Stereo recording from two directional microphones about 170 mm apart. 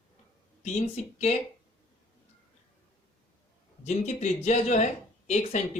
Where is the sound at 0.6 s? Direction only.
40° left (ahead or behind).